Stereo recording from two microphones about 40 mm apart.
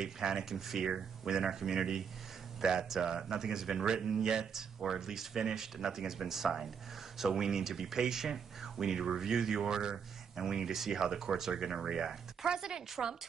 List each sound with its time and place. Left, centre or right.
0.0 s speech: centre